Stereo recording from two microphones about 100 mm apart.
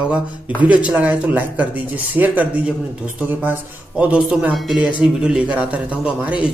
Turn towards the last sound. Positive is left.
turn(degrees=-10)  # may be behind; listen again after turning